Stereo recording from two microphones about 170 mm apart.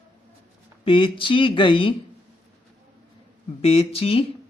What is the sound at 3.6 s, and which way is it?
Speech, 35° left (ahead or behind).